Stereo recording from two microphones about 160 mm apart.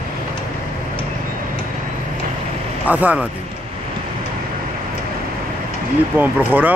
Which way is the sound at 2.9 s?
10° right (ahead or behind).